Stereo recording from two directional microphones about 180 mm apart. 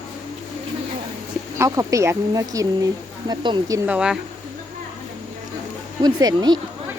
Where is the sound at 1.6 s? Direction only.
20° right (ahead or behind).